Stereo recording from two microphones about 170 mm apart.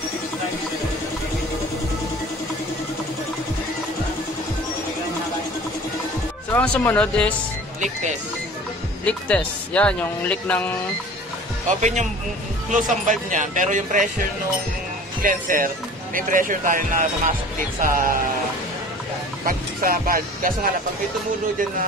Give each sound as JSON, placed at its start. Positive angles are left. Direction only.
{"t": 6.5, "sound": "speech", "side_deg": 10}
{"t": 9.0, "sound": "speech", "side_deg": 5}
{"t": 11.8, "sound": "speech", "side_deg": -45}
{"t": 15.2, "sound": "speech", "side_deg": -55}
{"t": 19.4, "sound": "speech", "side_deg": -55}